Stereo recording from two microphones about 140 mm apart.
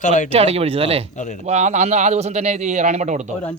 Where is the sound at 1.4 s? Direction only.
55° right (ahead or behind).